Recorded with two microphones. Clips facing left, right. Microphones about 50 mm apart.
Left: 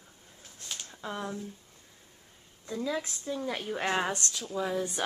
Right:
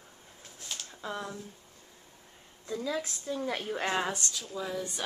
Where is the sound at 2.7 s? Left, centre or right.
Centre.